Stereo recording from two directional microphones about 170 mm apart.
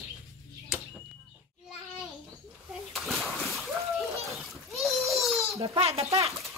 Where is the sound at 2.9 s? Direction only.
Centre (ahead or behind).